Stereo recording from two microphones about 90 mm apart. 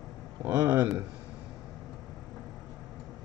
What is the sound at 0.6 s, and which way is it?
Speech, 15° right (ahead or behind).